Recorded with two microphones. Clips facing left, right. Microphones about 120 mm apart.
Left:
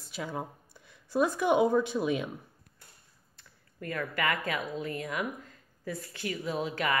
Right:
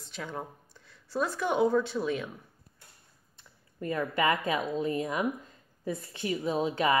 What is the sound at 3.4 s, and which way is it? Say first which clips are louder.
Speech: right 5 dB; 25° right (ahead or behind).